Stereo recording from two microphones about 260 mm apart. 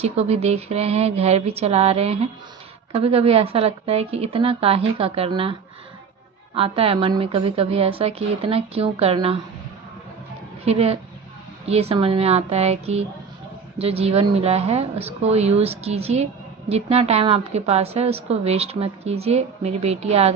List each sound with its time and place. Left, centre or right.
0.0 s a woman's voice: right
10.7 s a woman's voice: right